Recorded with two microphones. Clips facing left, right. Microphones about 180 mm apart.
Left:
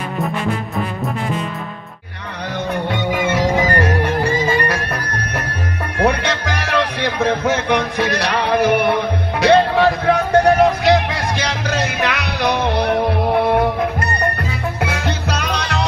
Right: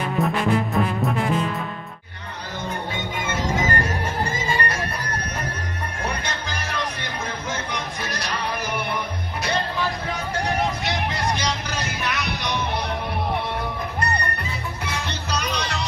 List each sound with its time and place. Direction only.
2.9 s music: 70° left (ahead or behind)